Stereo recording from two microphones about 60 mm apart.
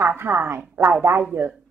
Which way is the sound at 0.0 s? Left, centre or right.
Right.